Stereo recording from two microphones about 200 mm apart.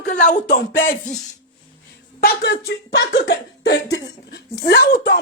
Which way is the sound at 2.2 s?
55° left (ahead or behind).